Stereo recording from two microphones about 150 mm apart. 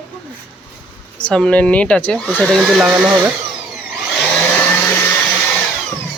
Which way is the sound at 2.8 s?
10° right (ahead or behind).